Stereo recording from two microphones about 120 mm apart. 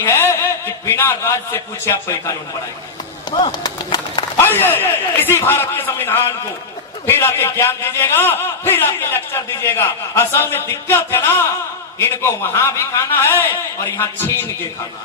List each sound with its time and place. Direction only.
0.0 s a man's voice: 20° left (ahead or behind)
3.2 s a sound: 40° left (ahead or behind)
4.4 s a man's voice: 20° left (ahead or behind)